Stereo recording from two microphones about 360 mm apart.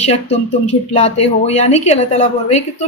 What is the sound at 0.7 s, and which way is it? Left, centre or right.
Speech, centre.